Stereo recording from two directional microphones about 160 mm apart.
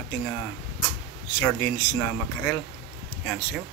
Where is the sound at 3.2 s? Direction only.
10° left (ahead or behind).